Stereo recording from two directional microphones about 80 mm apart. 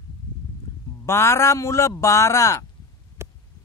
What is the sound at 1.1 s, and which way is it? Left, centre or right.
Speech, left.